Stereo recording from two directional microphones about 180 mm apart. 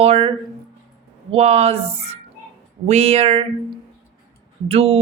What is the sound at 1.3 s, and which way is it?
Speech, 35° right (ahead or behind).